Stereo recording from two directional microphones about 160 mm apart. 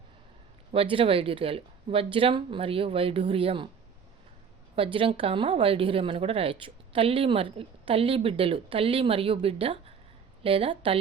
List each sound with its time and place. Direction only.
0.7 s speech: 35° right (ahead or behind)
4.7 s speech: 35° right (ahead or behind)